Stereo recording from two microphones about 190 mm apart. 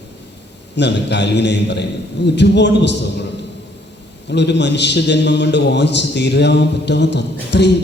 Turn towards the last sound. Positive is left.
turn(degrees=65)  # may be behind; listen again after turning